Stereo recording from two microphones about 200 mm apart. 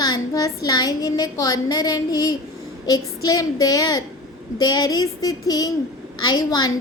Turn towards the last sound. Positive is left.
turn(degrees=20)  # may be behind; listen again after turning